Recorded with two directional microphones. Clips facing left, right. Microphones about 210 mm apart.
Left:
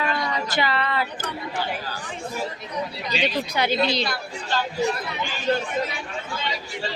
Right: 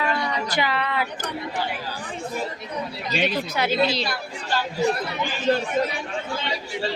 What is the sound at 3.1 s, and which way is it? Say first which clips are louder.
Speech: right 1 dB; 50° right (ahead or behind).